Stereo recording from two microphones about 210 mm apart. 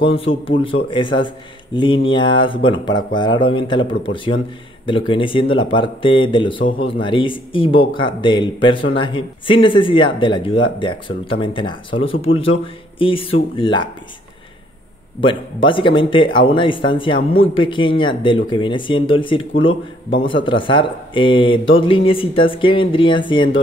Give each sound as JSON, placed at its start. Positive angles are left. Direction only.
{"t": 0.0, "sound": "speech", "side_deg": 25}
{"t": 15.1, "sound": "speech", "side_deg": 25}